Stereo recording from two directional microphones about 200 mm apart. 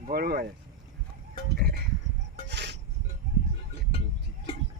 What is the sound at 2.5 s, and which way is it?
Rub, 60° right (ahead or behind).